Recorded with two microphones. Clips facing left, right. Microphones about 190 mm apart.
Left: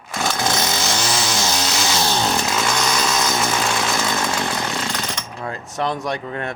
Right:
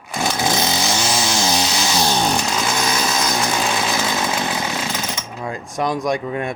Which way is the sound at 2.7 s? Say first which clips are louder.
Even; 5° right (ahead or behind).